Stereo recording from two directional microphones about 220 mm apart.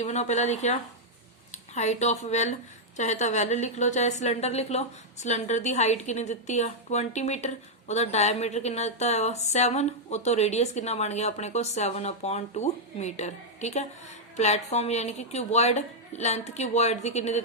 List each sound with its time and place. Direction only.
0.0 s a woman's voice: 30° left (ahead or behind)